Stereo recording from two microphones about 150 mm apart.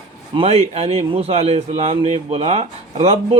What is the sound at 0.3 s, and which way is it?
Speech, 45° right (ahead or behind).